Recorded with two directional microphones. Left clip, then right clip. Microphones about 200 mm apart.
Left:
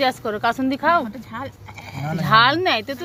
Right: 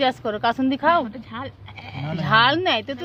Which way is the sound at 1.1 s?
35° right (ahead or behind).